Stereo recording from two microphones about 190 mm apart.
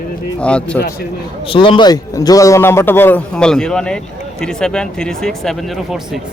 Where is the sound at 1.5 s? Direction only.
25° left (ahead or behind).